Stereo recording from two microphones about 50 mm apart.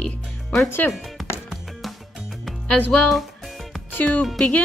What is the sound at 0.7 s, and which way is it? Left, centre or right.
Speech, left.